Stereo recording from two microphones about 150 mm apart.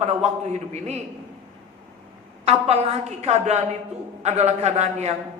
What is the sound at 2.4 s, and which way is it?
A man's voice, 45° right (ahead or behind).